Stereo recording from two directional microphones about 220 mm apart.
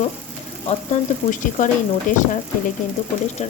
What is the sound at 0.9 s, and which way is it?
A woman's voice, 30° left (ahead or behind).